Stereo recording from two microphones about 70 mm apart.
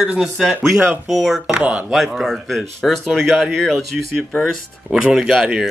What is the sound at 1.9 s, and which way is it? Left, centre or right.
Speech, centre.